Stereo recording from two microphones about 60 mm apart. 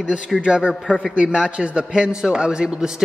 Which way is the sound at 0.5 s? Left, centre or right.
Centre.